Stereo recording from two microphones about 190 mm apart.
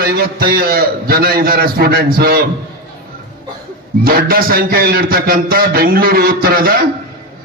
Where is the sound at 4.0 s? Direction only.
50° right (ahead or behind).